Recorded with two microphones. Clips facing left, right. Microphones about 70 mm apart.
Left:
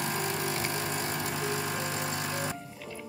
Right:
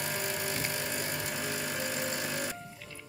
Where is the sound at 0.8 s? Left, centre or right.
Centre.